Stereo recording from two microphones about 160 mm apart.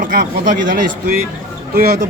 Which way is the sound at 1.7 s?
75° right (ahead or behind).